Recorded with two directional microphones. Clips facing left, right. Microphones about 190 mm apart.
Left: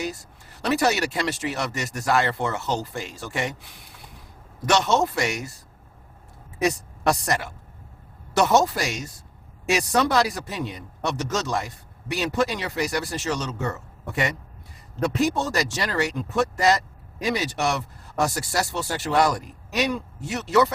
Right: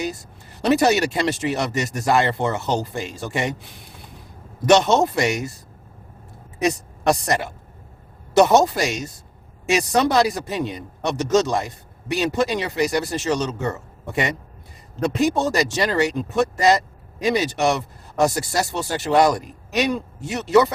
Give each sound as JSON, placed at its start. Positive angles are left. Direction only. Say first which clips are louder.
{"t": 0.0, "sound": "speech", "louder": "right 3 dB", "side_deg": -20}
{"t": 6.6, "sound": "a woman's voice", "louder": "right 2 dB", "side_deg": -20}